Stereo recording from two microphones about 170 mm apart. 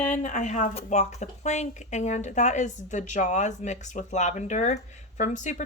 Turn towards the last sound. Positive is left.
turn(degrees=45)  # may be behind; listen again after turning